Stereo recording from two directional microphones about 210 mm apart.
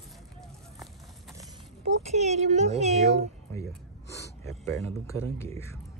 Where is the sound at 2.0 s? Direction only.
30° right (ahead or behind).